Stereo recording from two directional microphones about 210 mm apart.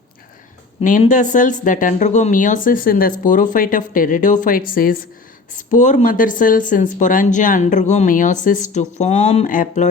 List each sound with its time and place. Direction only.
0.8 s speech: 35° left (ahead or behind)